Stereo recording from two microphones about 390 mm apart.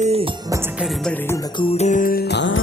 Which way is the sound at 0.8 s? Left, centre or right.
Centre.